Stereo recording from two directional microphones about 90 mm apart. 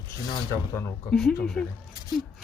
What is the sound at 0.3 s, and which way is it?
Speech, 35° left (ahead or behind).